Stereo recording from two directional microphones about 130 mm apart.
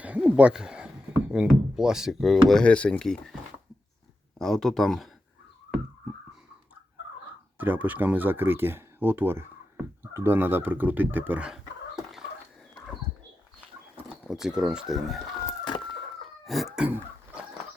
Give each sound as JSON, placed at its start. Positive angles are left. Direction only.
{"t": 0.0, "sound": "speech", "side_deg": -10}
{"t": 4.4, "sound": "speech", "side_deg": 0}
{"t": 7.6, "sound": "speech", "side_deg": -15}
{"t": 13.9, "sound": "speech", "side_deg": -5}
{"t": 15.4, "sound": "chicken", "side_deg": 35}
{"t": 16.5, "sound": "chicken", "side_deg": 0}